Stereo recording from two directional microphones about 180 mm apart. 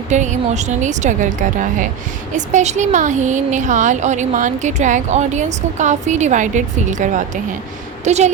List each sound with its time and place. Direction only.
0.1 s a woman's voice: 40° right (ahead or behind)